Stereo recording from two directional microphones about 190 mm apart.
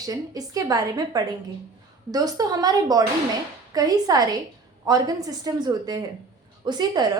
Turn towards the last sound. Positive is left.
turn(degrees=-20)  # may be behind; listen again after turning